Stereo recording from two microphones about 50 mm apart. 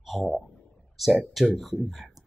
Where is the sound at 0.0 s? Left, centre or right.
Centre.